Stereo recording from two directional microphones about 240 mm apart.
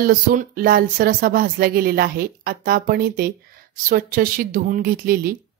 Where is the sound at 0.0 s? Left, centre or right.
Right.